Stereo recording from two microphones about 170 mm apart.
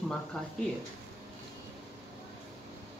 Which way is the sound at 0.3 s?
Centre (ahead or behind).